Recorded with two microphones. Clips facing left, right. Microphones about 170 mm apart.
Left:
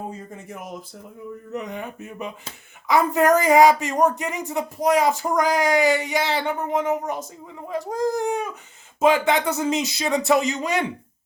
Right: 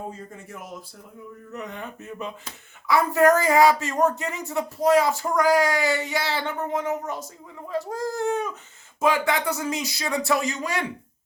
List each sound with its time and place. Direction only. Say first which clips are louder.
0.4 s speech: left 3 dB; 20° left (ahead or behind)